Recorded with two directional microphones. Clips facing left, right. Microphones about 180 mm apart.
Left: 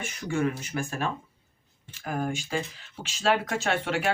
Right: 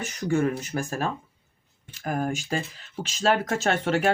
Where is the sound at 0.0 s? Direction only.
40° right (ahead or behind).